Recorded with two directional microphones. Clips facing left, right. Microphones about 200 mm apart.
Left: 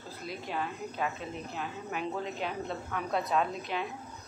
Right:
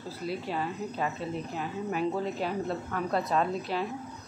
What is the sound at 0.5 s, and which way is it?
Speech, 5° right (ahead or behind).